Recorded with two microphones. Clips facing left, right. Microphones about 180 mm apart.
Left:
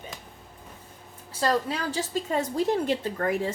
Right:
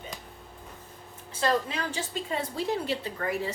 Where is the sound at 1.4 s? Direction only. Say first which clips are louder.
Left 2 dB; 40° left (ahead or behind).